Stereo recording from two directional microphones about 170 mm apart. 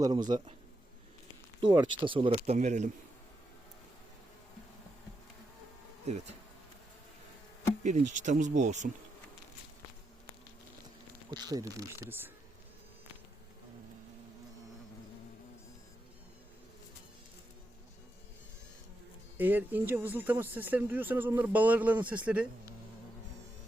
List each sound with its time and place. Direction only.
0.0 s speech: 25° right (ahead or behind)
1.6 s speech: 25° right (ahead or behind); by 2.9 s 45° right (ahead or behind)
6.1 s speech: 40° right (ahead or behind)
7.9 s speech: 45° right (ahead or behind)
11.3 s speech: 20° right (ahead or behind)
19.4 s speech: 10° right (ahead or behind)